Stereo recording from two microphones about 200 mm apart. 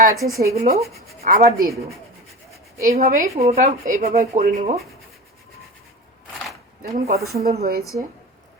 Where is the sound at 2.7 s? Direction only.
15° right (ahead or behind).